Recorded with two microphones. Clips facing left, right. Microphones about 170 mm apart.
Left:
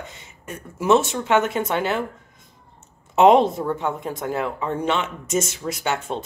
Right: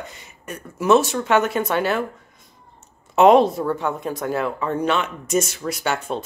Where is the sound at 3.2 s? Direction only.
20° left (ahead or behind).